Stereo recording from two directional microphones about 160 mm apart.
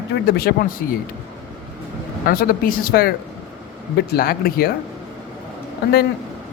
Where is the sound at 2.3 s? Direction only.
65° left (ahead or behind).